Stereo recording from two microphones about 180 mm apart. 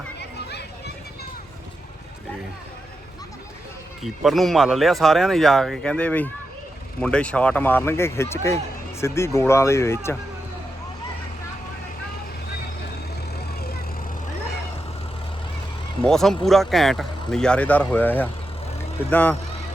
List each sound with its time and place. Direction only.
0.2 s children playing: 70° left (ahead or behind)
4.0 s speech: centre (ahead or behind); by 10.2 s 15° left (ahead or behind)
16.0 s speech: centre (ahead or behind)